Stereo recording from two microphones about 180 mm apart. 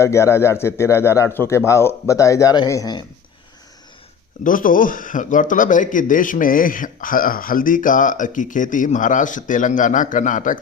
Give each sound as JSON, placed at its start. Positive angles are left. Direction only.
{"t": 0.0, "sound": "speech", "side_deg": 15}
{"t": 4.4, "sound": "a man's voice", "side_deg": 50}